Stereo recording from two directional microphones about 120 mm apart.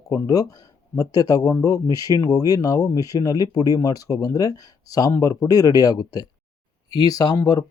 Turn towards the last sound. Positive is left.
turn(degrees=35)  # may be behind; listen again after turning